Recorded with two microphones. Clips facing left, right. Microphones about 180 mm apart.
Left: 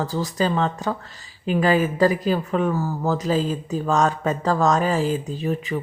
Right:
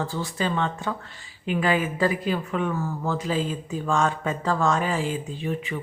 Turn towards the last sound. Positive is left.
turn(degrees=40)  # may be behind; listen again after turning